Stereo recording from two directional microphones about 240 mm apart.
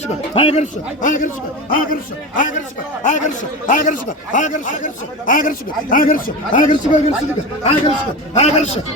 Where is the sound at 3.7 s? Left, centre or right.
Left.